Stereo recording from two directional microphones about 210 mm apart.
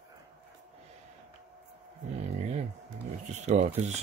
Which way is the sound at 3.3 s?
35° right (ahead or behind).